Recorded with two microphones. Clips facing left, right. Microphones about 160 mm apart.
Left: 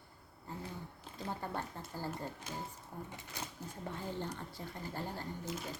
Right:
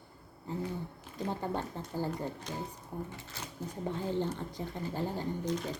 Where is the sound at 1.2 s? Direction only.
20° right (ahead or behind).